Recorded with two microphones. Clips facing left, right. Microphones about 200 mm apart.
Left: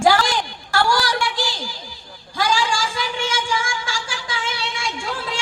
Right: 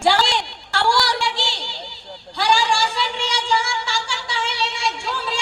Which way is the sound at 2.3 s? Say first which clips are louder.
Right 1 dB; 60° left (ahead or behind).